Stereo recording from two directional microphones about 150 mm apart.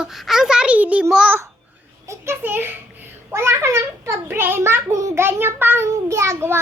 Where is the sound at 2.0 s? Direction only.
20° right (ahead or behind).